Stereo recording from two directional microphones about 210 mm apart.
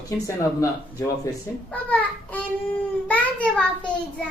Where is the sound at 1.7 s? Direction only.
10° left (ahead or behind).